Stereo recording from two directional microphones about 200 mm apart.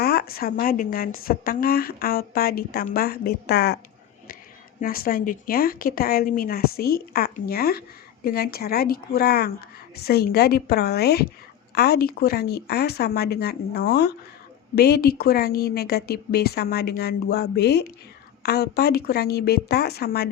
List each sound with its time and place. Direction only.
0.0 s a woman's voice: 50° left (ahead or behind)
4.8 s a woman's voice: 45° left (ahead or behind)